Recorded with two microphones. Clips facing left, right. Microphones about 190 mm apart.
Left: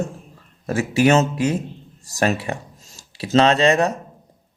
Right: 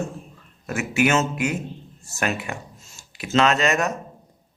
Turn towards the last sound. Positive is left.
turn(degrees=30)  # may be behind; listen again after turning